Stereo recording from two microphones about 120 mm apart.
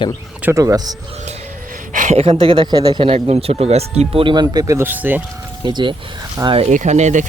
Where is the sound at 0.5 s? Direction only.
30° right (ahead or behind).